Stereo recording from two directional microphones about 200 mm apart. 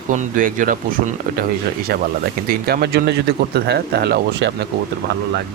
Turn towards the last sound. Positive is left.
turn(degrees=-55)  # may be behind; listen again after turning